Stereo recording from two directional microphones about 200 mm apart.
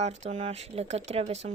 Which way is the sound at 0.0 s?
35° right (ahead or behind).